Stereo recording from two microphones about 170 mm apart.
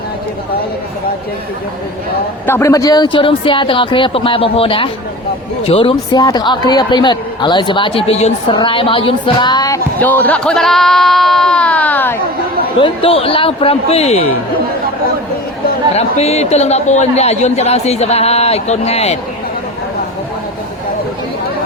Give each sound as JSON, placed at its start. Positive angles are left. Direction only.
{"t": 2.5, "sound": "speech", "side_deg": 15}
{"t": 12.8, "sound": "a man's voice", "side_deg": 35}
{"t": 16.0, "sound": "a man's voice", "side_deg": 40}